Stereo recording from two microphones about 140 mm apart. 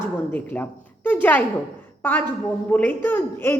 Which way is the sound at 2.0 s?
15° left (ahead or behind).